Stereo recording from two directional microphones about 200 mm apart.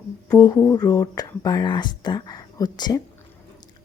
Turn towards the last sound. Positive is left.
turn(degrees=20)  # may be behind; listen again after turning